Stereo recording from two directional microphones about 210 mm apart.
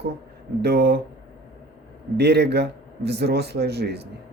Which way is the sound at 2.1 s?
50° right (ahead or behind).